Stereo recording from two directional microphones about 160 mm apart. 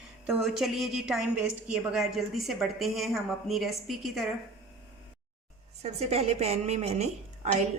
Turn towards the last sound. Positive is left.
turn(degrees=-40)  # may be behind; listen again after turning